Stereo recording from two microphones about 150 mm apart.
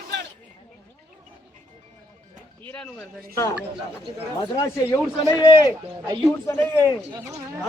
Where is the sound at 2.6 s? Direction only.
10° left (ahead or behind).